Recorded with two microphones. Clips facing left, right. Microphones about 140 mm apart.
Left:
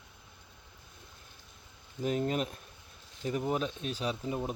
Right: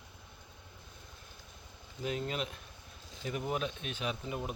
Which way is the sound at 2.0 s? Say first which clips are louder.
Left 5 dB; 40° left (ahead or behind).